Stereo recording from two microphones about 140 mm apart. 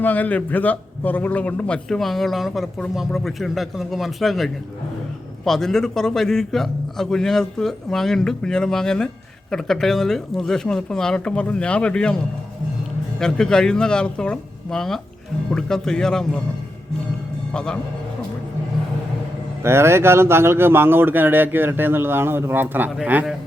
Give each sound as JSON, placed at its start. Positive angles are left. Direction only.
{"t": 0.0, "sound": "a man's voice", "side_deg": 10}
{"t": 17.5, "sound": "a man's voice", "side_deg": 5}
{"t": 19.6, "sound": "speech", "side_deg": -20}